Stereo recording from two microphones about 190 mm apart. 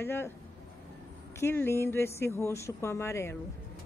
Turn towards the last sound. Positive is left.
turn(degrees=15)  # may be behind; listen again after turning